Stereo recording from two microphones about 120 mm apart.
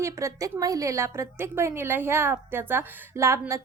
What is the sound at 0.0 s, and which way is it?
A woman's voice, 25° right (ahead or behind).